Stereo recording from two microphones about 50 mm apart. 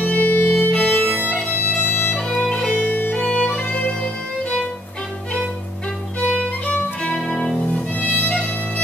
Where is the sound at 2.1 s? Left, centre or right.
Centre.